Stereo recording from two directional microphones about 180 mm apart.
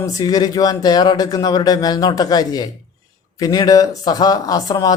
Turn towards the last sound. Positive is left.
turn(degrees=20)  # may be behind; listen again after turning